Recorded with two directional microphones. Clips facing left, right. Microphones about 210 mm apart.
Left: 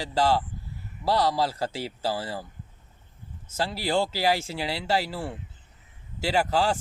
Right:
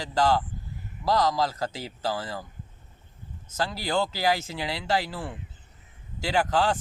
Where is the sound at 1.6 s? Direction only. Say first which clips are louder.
Left 2 dB; 10° left (ahead or behind).